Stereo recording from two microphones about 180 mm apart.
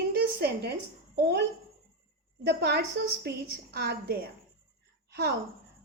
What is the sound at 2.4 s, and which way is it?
A woman's voice, 65° right (ahead or behind).